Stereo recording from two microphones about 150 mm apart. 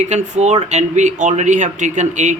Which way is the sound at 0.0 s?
50° right (ahead or behind).